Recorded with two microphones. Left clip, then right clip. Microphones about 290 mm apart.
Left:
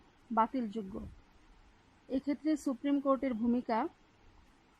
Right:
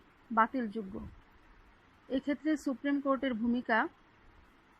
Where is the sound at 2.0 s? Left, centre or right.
Centre.